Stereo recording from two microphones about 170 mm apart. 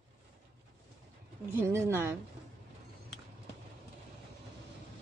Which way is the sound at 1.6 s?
15° right (ahead or behind).